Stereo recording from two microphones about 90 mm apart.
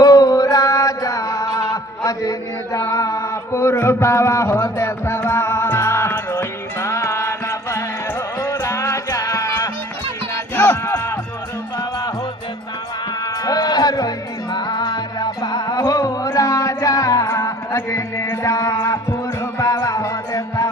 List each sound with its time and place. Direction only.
0.0 s music: 40° left (ahead or behind)
2.7 s mantra: 40° left (ahead or behind)
6.8 s music: 35° left (ahead or behind)
10.7 s music: 30° left (ahead or behind)
13.4 s music: 45° left (ahead or behind)
19.8 s music: 35° left (ahead or behind)